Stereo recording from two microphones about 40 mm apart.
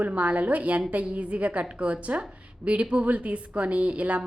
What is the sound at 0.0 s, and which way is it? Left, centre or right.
A woman's voice, right.